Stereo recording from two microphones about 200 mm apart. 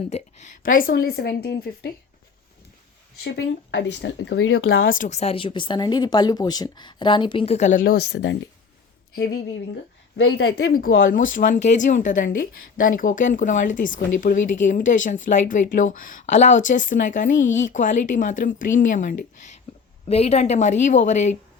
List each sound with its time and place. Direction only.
0.1 s a woman's voice: 40° left (ahead or behind)
3.2 s speech: 60° left (ahead or behind)
4.9 s speech: 35° left (ahead or behind)
8.1 s speech: 90° left
9.1 s a woman's voice: 55° left (ahead or behind); by 21.3 s 35° left (ahead or behind)